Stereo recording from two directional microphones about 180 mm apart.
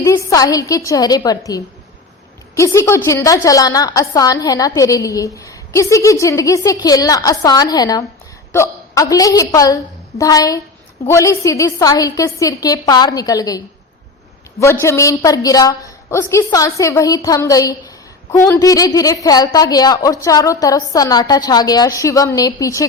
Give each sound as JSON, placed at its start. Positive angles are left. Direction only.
{"t": 0.0, "sound": "a woman's voice", "side_deg": 15}
{"t": 14.6, "sound": "a woman's voice", "side_deg": 15}